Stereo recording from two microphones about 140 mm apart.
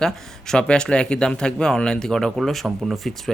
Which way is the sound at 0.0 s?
5° left (ahead or behind).